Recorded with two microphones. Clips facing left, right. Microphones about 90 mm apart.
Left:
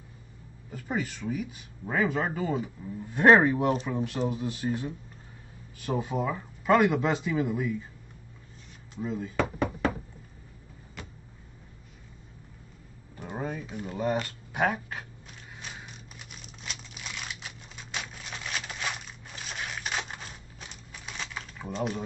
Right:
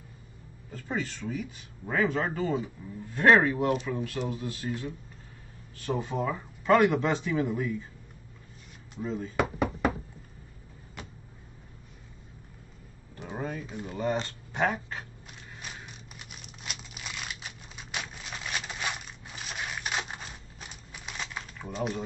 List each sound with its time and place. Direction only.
0.7 s speech: 10° left (ahead or behind)
3.1 s speech: 20° left (ahead or behind)
5.9 s speech: 10° left (ahead or behind)
8.9 s speech: 5° left (ahead or behind)
9.4 s knock: 5° right (ahead or behind)
13.1 s a sound: 5° left (ahead or behind)
15.6 s crumpling: centre (ahead or behind)
21.5 s speech: centre (ahead or behind)